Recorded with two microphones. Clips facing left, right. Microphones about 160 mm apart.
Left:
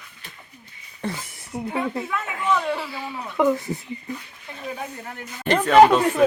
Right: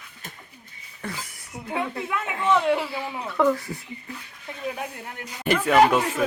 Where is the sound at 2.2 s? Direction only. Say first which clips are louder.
Right 3 dB; 25° right (ahead or behind).